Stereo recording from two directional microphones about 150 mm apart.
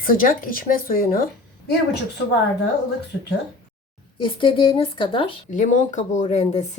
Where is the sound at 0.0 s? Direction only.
70° left (ahead or behind).